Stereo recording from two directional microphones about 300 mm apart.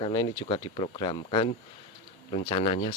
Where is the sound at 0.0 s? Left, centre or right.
Centre.